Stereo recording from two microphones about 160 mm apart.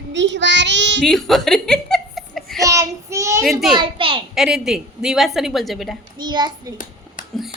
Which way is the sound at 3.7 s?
30° right (ahead or behind).